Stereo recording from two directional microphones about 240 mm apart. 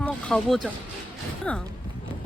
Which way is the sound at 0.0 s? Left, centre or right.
Centre.